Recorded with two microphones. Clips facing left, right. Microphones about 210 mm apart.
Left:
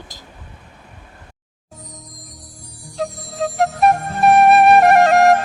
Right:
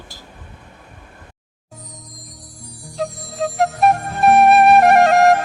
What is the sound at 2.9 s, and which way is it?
Flute, centre (ahead or behind).